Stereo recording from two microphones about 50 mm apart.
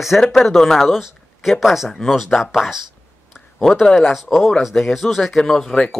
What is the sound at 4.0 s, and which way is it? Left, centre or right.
Speech, centre.